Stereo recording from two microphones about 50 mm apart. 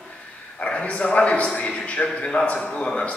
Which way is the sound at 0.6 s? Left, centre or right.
Left.